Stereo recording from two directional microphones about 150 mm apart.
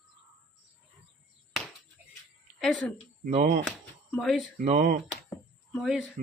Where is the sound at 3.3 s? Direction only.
55° right (ahead or behind).